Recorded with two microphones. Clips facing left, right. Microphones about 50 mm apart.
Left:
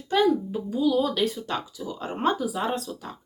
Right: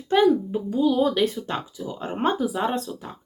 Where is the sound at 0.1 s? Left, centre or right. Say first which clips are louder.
Right 3 dB; right.